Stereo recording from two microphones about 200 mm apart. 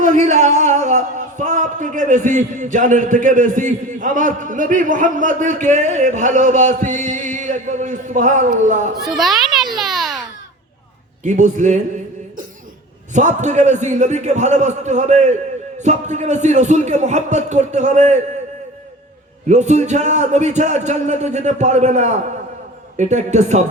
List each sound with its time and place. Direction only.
0.0 s speech: 35° right (ahead or behind)
9.0 s children playing: centre (ahead or behind)
11.2 s a man's voice: 40° right (ahead or behind)
13.1 s a man's voice: 35° right (ahead or behind)
19.5 s a man's voice: 35° right (ahead or behind)